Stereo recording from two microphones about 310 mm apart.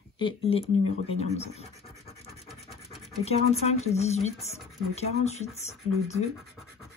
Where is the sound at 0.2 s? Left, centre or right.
Centre.